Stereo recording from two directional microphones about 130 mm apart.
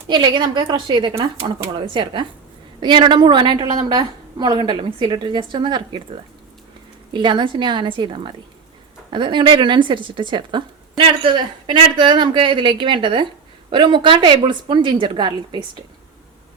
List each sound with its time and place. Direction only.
0.1 s speech: 35° right (ahead or behind)
7.1 s speech: 40° right (ahead or behind)